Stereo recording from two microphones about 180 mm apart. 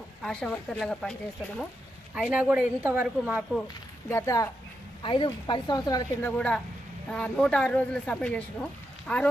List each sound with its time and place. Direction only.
0.2 s speech: 5° left (ahead or behind)
2.1 s speech: 5° right (ahead or behind)
4.1 s speech: 15° left (ahead or behind)
6.3 s speech: 5° left (ahead or behind)